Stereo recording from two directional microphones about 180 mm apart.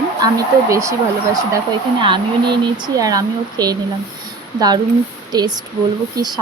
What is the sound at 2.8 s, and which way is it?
Speech, 20° right (ahead or behind).